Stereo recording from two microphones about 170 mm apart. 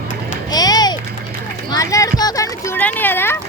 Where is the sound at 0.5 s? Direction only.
25° left (ahead or behind).